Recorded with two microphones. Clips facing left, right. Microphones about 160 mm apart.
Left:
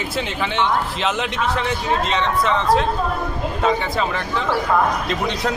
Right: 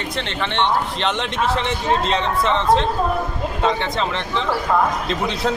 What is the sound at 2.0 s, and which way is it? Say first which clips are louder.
Speech: even; 35° right (ahead or behind).